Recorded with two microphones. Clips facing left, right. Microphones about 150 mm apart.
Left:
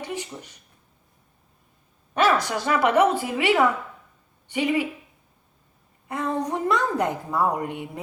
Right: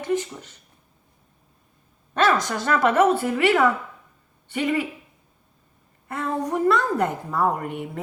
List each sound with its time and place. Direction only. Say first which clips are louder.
0.0 s speech: right 7 dB; 15° left (ahead or behind)
2.1 s a woman's voice: even; 10° left (ahead or behind)
6.1 s a woman's voice: even; 15° left (ahead or behind)